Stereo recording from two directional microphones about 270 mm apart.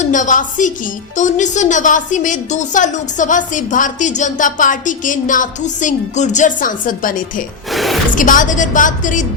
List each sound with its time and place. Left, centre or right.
0.0 s a woman's voice: left
7.7 s gasp: centre
8.1 s a woman's voice: left